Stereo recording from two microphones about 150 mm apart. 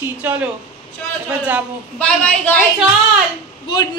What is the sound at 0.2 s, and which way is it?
Speech, 10° right (ahead or behind).